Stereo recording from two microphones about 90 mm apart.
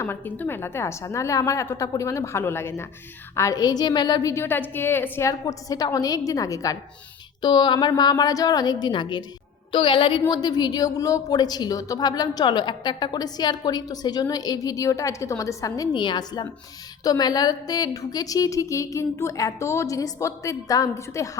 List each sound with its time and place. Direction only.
0.0 s speech: 20° left (ahead or behind)
3.6 s a woman's voice: 45° left (ahead or behind)
4.4 s a woman's voice: 25° left (ahead or behind)
5.3 s speech: 40° left (ahead or behind)
7.4 s a woman's voice: 55° left (ahead or behind)
16.0 s a woman's voice: 55° left (ahead or behind); by 21.2 s 35° left (ahead or behind)